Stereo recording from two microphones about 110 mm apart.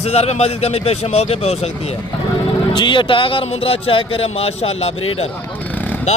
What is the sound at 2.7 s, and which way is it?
Speech, 45° left (ahead or behind).